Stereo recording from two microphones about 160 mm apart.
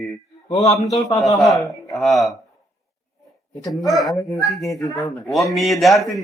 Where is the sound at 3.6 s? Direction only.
25° left (ahead or behind).